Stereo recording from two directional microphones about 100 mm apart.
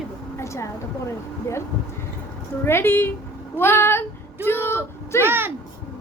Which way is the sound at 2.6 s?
25° left (ahead or behind).